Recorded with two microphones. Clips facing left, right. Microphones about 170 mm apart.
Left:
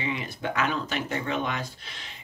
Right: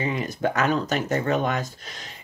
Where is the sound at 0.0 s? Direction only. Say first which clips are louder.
Right 6 dB; 45° right (ahead or behind).